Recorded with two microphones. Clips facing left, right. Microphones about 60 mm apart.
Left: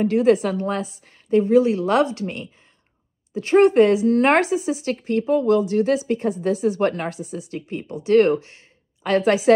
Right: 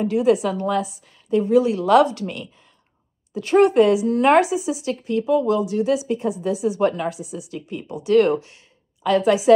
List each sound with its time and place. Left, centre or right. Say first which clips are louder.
0.0 s a woman's voice: left 1 dB; left
5.7 s a woman's voice: left 1 dB; left